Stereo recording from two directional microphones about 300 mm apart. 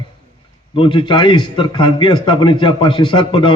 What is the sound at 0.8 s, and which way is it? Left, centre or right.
A man's voice, centre.